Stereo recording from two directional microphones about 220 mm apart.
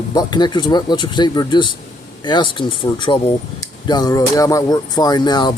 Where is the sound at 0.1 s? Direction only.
20° left (ahead or behind).